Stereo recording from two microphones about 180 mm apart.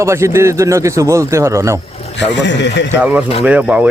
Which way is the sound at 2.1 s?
80° left.